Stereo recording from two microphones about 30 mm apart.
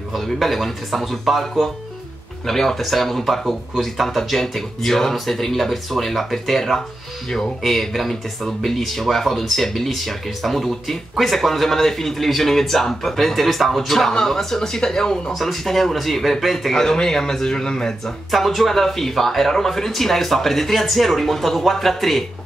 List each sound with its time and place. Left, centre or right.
0.1 s a man's voice: centre
2.4 s a man's voice: centre
15.3 s speech: centre; by 17.9 s left
18.0 s speech: centre